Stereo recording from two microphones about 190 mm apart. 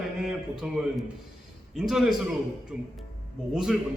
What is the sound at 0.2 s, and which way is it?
A man's voice, centre (ahead or behind).